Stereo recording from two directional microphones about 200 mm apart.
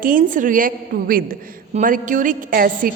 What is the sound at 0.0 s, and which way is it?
A woman's voice, 45° right (ahead or behind).